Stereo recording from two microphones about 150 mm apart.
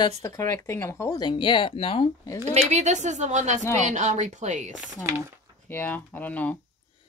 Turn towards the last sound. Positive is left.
turn(degrees=10)  # may be behind; listen again after turning